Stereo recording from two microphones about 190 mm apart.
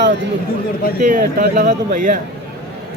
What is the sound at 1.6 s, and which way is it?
Speech, 40° right (ahead or behind).